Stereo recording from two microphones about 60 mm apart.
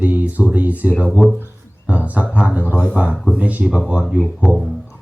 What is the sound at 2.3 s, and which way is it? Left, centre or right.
Speech, right.